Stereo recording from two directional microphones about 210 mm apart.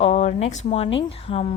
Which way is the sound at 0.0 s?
30° left (ahead or behind).